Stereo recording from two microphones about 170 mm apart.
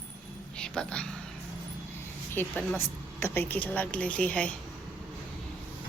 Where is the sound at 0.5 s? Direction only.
5° left (ahead or behind).